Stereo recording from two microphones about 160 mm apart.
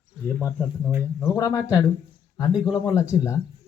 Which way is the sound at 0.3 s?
10° left (ahead or behind).